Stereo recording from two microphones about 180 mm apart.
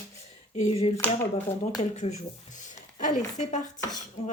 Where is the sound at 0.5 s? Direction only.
35° left (ahead or behind).